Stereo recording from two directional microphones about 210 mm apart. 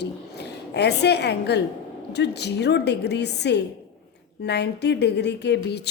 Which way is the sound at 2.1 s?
55° left (ahead or behind).